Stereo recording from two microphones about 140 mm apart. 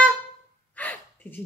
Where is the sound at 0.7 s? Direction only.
10° left (ahead or behind).